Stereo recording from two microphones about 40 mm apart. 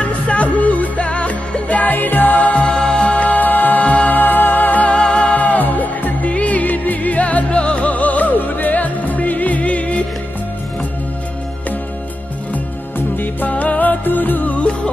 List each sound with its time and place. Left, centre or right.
0.0 s music: left
2.0 s music: left
2.6 s music: left
3.8 s music: left
4.2 s music: left
5.0 s music: left
5.3 s music: left
13.1 s music: left
13.5 s music: left